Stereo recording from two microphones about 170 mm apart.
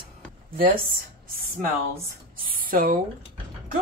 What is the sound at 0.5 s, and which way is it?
Speech, 60° right (ahead or behind).